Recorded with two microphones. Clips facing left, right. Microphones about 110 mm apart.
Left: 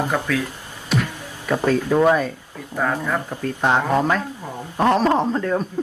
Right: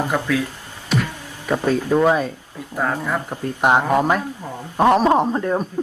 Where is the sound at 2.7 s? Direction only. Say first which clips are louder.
Even; 5° right (ahead or behind).